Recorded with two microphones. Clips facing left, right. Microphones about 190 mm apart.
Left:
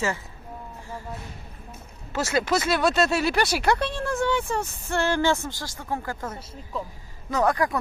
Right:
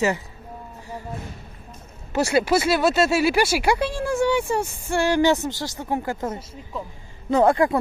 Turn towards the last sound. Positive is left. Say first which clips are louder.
# right 6 dB
turn(degrees=-25)  # may be behind; listen again after turning